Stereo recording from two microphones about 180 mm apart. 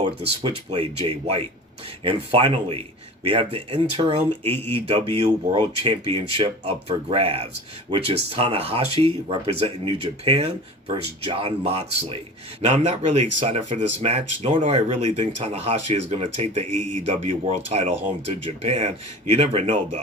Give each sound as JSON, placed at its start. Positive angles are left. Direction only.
{"t": 0.0, "sound": "speech", "side_deg": -30}